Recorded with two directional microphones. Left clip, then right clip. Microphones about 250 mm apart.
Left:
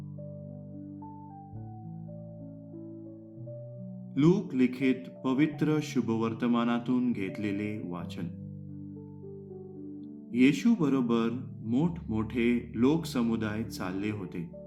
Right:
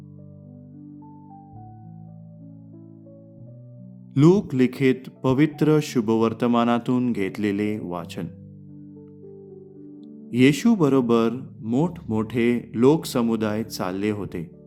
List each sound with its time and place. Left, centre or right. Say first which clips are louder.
4.1 s speech: right 8 dB; right
10.3 s speech: right 7 dB; right